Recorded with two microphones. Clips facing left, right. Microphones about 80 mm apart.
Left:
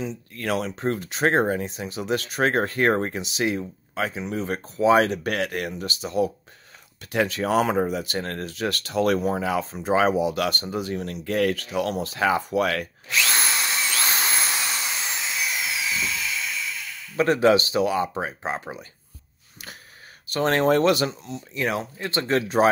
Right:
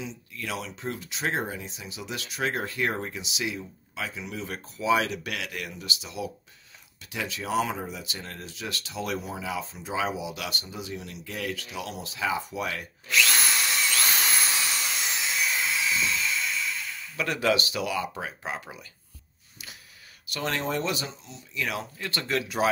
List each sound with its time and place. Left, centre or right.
0.0 s speech: left
13.1 s drill: left
15.6 s a sound: centre
17.2 s speech: left
20.2 s speech: left
21.3 s speech: left